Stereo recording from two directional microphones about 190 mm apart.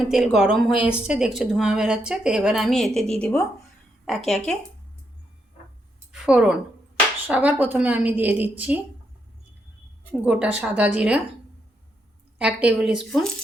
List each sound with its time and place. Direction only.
0.0 s speech: centre (ahead or behind)
6.1 s a sound: 5° right (ahead or behind)
7.3 s a woman's voice: 10° right (ahead or behind)
10.1 s a woman's voice: 5° right (ahead or behind)
12.4 s speech: 5° right (ahead or behind)